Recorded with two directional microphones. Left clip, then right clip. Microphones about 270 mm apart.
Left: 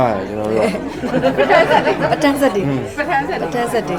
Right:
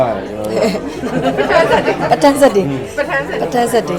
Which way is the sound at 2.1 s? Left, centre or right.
Centre.